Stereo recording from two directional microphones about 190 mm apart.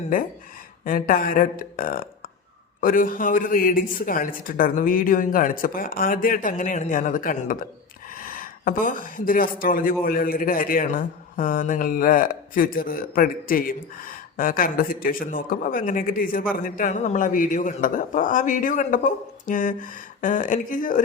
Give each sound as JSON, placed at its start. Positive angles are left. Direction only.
{"t": 0.9, "sound": "speech", "side_deg": 50}